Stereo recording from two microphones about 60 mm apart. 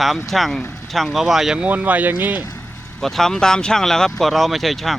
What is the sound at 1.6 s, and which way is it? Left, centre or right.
Speech, right.